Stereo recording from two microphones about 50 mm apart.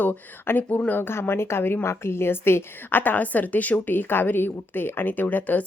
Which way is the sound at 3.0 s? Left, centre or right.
Left.